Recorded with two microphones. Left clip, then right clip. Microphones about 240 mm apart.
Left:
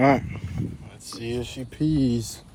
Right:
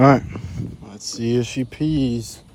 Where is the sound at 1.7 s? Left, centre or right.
Right.